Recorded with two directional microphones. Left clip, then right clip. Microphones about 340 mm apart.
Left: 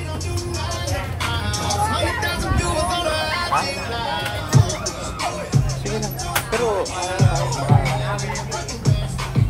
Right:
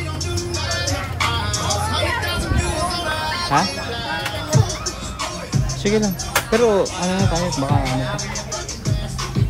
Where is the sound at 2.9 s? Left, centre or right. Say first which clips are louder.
Left 1 dB; left.